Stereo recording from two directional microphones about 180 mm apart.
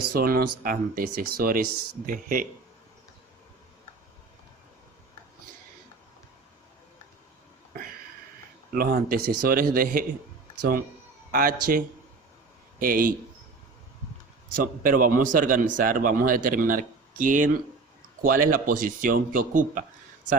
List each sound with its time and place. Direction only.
0.0 s speech: 55° right (ahead or behind)
8.7 s speech: 55° right (ahead or behind)
11.3 s speech: 55° right (ahead or behind)
12.8 s speech: 50° right (ahead or behind)
14.5 s speech: 50° right (ahead or behind)